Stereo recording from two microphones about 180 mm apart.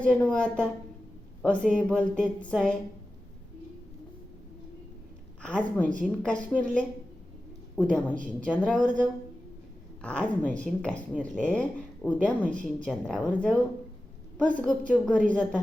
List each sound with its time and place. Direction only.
0.0 s a woman's voice: 5° left (ahead or behind)
5.4 s a woman's voice: 5° left (ahead or behind)